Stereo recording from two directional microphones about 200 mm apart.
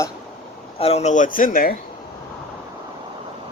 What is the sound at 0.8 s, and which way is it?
Speech, 30° left (ahead or behind).